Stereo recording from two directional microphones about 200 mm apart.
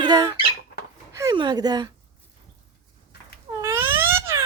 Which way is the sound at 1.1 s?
15° right (ahead or behind).